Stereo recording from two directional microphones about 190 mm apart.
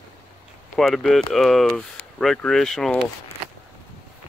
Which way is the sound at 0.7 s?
Centre (ahead or behind).